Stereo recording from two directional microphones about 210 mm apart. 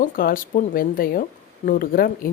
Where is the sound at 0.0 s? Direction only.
40° left (ahead or behind).